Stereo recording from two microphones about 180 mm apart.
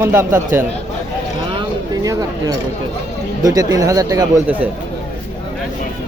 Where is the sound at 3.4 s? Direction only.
20° right (ahead or behind).